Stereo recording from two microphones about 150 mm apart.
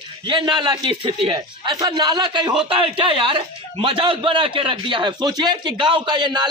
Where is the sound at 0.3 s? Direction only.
30° right (ahead or behind).